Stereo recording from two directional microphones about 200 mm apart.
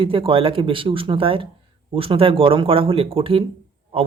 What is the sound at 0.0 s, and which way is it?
Speech, 25° right (ahead or behind).